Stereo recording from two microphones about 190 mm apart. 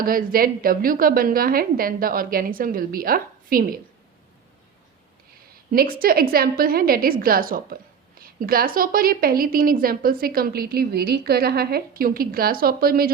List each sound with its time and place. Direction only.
0.0 s a woman's voice: 50° right (ahead or behind)
5.7 s a woman's voice: 50° right (ahead or behind)